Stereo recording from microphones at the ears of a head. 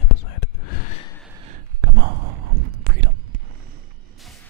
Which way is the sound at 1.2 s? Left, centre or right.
Right.